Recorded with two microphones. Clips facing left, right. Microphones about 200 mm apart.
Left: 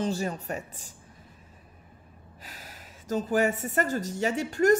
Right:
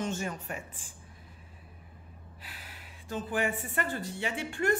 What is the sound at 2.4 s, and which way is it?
Speech, 40° left (ahead or behind).